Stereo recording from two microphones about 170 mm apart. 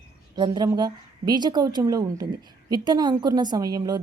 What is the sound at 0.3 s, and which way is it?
A woman's voice, 25° right (ahead or behind).